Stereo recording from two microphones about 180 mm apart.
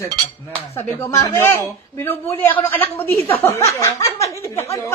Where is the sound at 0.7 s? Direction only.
15° left (ahead or behind).